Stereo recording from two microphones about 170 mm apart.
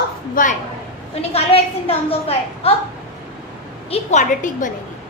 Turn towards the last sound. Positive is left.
turn(degrees=45)  # may be behind; listen again after turning